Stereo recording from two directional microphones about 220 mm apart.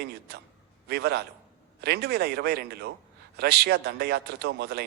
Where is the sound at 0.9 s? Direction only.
45° right (ahead or behind).